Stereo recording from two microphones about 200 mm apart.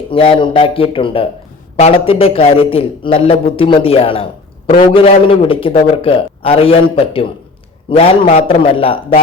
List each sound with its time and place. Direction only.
0.1 s a man's voice: 25° left (ahead or behind)